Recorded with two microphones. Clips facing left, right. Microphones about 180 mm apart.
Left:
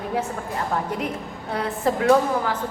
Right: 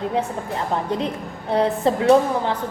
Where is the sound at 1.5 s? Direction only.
25° right (ahead or behind).